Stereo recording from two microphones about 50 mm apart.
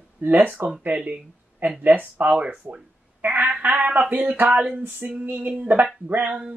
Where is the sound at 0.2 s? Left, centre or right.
Right.